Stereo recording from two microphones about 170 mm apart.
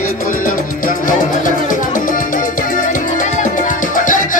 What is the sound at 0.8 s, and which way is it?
Music, 50° left (ahead or behind).